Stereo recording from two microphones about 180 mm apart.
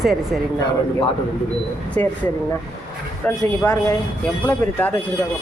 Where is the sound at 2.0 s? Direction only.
35° right (ahead or behind).